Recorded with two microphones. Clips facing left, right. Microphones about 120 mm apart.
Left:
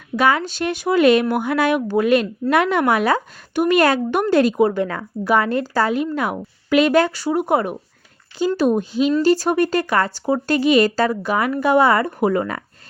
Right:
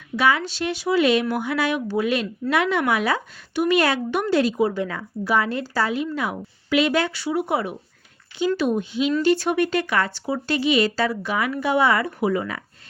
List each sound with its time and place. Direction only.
0.2 s speech: 45° left (ahead or behind)